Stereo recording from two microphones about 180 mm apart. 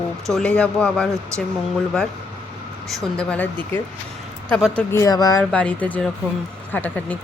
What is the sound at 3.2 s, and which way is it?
Speech, 5° left (ahead or behind).